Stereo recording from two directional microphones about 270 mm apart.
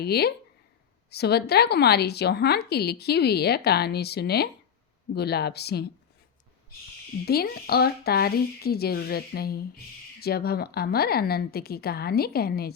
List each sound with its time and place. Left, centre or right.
0.0 s speech: left
7.3 s speech: left